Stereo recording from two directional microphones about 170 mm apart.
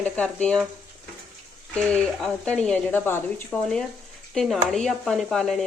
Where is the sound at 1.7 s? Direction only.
5° left (ahead or behind).